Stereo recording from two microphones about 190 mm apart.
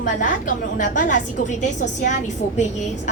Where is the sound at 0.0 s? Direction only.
45° left (ahead or behind).